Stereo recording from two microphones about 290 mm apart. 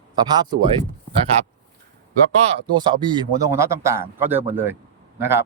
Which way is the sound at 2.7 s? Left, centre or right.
Centre.